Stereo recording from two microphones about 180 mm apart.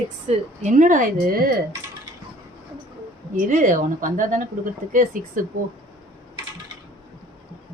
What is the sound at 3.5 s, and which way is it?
A woman's voice, 45° right (ahead or behind).